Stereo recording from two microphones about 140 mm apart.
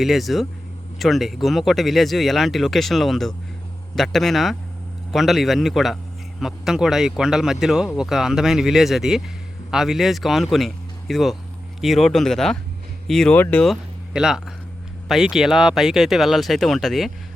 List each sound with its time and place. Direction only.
0.0 s speech: centre (ahead or behind)
13.7 s speech: 5° right (ahead or behind)